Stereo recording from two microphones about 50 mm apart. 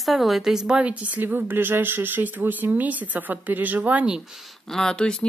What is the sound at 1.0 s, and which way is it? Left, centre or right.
Speech, right.